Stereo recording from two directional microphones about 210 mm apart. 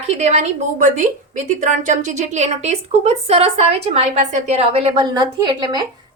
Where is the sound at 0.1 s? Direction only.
30° right (ahead or behind).